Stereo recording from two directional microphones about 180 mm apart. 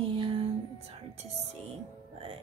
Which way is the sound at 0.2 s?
30° right (ahead or behind).